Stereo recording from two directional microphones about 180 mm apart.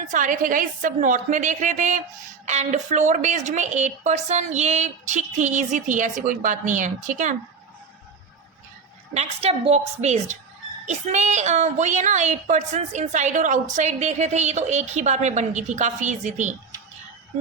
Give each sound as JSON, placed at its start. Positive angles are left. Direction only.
{"t": 0.1, "sound": "a woman's voice", "side_deg": -45}
{"t": 9.1, "sound": "a woman's voice", "side_deg": -35}